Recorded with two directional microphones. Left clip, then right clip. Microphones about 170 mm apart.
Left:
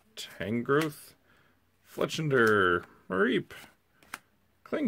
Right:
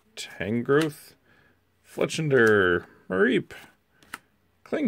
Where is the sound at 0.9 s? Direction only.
15° right (ahead or behind).